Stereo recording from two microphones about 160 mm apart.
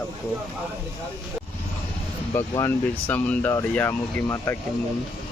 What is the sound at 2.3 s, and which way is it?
Speech, 20° left (ahead or behind).